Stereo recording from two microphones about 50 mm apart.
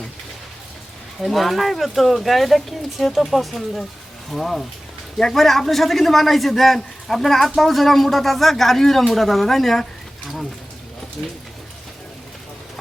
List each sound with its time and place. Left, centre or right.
1.2 s a man's voice: centre
11.2 s speech: left